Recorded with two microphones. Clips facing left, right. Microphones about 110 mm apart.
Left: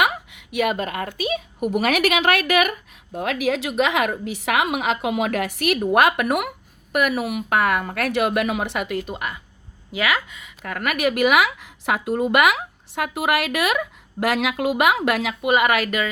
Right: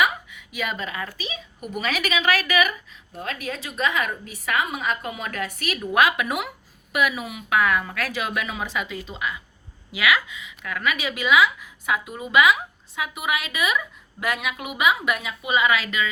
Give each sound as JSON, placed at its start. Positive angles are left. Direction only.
{"t": 0.0, "sound": "a woman's voice", "side_deg": 65}
{"t": 5.8, "sound": "speech", "side_deg": 55}
{"t": 9.9, "sound": "a woman's voice", "side_deg": 40}